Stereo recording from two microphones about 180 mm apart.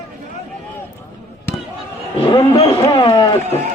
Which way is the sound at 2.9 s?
30° left (ahead or behind).